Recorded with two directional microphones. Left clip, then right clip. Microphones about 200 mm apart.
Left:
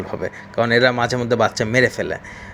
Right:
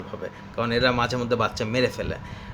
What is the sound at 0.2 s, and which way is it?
Speech, 25° left (ahead or behind).